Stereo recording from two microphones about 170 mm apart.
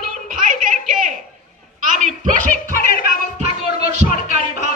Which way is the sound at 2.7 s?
60° left (ahead or behind).